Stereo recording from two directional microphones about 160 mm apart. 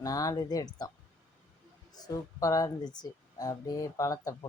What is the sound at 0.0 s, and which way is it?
Speech, 20° left (ahead or behind).